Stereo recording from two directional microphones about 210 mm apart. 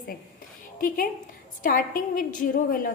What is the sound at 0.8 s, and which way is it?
A woman's voice, 40° left (ahead or behind).